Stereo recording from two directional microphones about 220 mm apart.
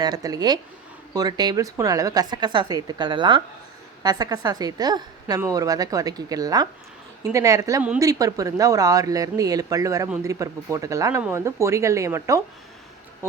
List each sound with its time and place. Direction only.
0.0 s a woman's voice: 15° right (ahead or behind)